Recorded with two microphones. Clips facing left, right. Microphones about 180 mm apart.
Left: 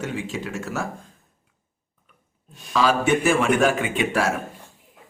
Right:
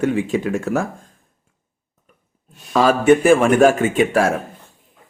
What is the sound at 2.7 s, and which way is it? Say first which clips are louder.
A man's voice: right 6 dB; 50° right (ahead or behind).